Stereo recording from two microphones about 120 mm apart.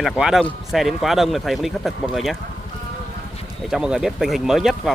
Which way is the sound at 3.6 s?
5° right (ahead or behind).